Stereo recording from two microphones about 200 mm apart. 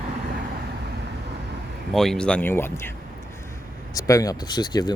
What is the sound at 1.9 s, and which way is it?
Speech, centre (ahead or behind).